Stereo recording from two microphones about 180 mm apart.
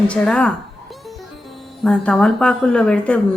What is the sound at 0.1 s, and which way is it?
Speech, 5° left (ahead or behind).